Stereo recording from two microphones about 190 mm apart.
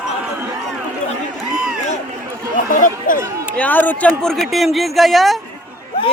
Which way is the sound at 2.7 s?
45° left (ahead or behind).